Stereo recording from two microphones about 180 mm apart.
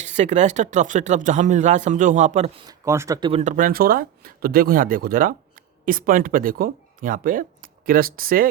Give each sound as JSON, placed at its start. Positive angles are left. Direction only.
{"t": 0.0, "sound": "speech", "side_deg": -40}
{"t": 2.6, "sound": "speech", "side_deg": -15}
{"t": 3.2, "sound": "speech", "side_deg": -25}
{"t": 3.4, "sound": "speech", "side_deg": -50}